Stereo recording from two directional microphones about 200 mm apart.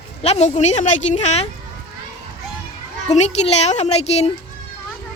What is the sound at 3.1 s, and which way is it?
A woman's voice, 35° left (ahead or behind).